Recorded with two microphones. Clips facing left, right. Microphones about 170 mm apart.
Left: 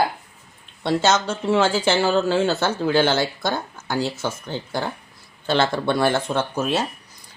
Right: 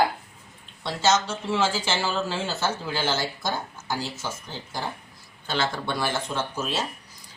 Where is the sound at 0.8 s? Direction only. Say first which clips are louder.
Left 4 dB; 60° left (ahead or behind).